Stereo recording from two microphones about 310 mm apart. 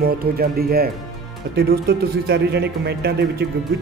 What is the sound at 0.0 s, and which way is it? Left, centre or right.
Speech, right.